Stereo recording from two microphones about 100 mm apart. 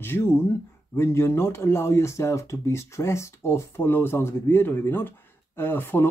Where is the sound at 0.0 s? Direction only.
25° left (ahead or behind).